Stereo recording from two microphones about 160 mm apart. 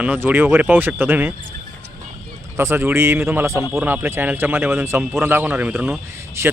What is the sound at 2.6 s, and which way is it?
Speech, 15° right (ahead or behind).